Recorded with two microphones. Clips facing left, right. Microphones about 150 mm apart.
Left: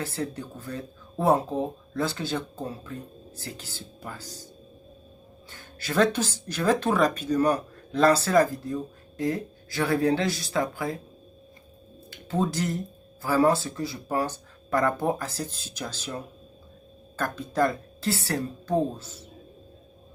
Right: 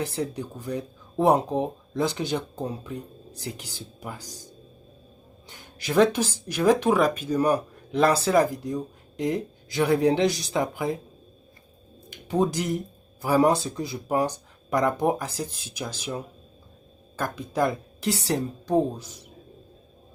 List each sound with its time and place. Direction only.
0.0 s speech: 15° right (ahead or behind)
5.5 s speech: 15° right (ahead or behind)
12.1 s speech: 15° right (ahead or behind)